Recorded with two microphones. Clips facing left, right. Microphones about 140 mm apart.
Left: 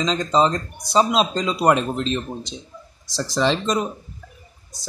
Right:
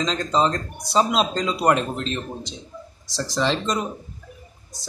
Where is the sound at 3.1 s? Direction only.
Centre (ahead or behind).